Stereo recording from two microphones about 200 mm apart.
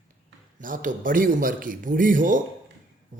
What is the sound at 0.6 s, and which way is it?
Speech, 40° right (ahead or behind).